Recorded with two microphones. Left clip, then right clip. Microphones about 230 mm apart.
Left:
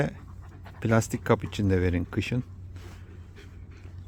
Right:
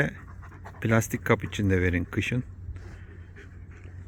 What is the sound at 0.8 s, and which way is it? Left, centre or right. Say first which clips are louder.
Speech: even; centre.